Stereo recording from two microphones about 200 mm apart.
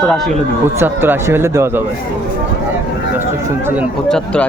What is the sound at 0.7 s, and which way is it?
Speech, 10° right (ahead or behind).